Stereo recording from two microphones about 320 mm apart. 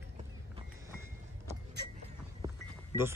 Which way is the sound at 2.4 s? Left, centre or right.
Centre.